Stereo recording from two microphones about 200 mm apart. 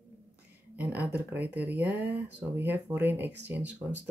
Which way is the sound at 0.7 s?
10° right (ahead or behind).